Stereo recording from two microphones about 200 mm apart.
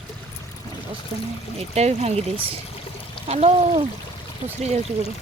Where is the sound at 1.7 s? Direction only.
30° right (ahead or behind).